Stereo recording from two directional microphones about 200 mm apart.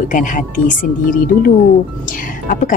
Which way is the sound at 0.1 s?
40° left (ahead or behind).